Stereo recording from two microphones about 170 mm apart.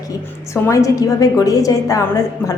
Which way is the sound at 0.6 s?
20° left (ahead or behind).